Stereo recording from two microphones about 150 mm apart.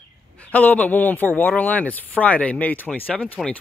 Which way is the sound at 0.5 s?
10° left (ahead or behind).